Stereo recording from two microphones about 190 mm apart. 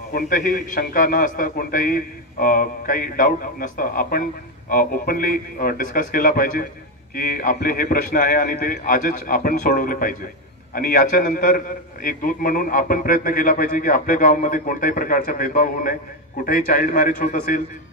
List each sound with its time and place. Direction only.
0.1 s a man's voice: 45° left (ahead or behind)